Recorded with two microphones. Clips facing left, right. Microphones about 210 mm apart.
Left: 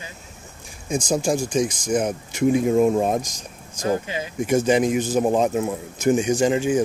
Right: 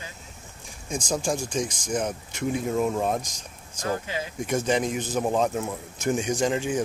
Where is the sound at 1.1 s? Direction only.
10° left (ahead or behind).